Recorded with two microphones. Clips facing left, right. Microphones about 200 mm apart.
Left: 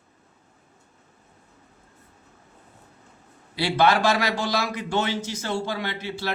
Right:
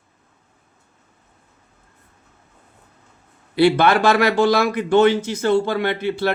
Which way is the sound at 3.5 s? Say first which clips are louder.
Right 6 dB; 55° right (ahead or behind).